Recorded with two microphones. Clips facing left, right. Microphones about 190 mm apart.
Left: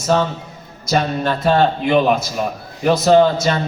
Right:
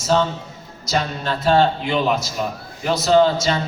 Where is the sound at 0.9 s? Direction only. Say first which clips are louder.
Left 5 dB; 55° left (ahead or behind).